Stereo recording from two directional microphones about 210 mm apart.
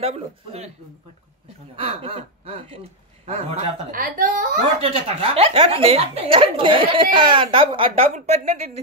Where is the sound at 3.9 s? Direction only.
40° right (ahead or behind).